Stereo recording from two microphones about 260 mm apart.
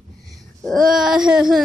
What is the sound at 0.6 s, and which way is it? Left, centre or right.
Child singing, centre.